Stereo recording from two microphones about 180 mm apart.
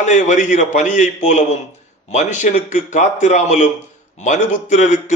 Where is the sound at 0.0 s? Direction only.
40° left (ahead or behind).